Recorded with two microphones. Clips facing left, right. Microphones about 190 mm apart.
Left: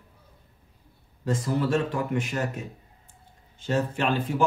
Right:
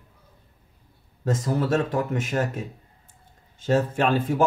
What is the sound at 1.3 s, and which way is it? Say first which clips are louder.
Speech: right 1 dB; 45° right (ahead or behind).